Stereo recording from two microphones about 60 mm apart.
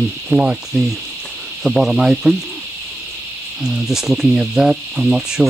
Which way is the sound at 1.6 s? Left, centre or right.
Centre.